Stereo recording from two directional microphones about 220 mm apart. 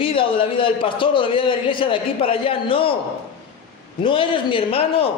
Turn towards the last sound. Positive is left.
turn(degrees=25)  # may be behind; listen again after turning